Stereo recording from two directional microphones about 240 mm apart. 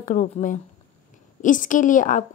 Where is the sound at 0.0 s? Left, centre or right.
Left.